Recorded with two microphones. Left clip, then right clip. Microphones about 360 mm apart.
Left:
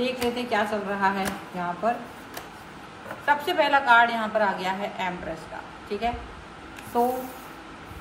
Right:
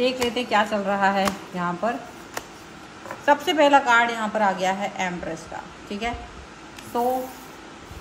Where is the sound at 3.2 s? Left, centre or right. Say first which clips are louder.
Right 4 dB; right.